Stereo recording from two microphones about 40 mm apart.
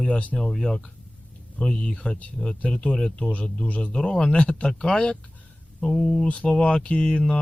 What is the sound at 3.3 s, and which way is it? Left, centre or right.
Speech, left.